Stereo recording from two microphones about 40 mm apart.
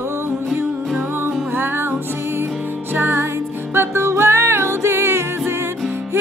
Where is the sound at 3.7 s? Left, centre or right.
Right.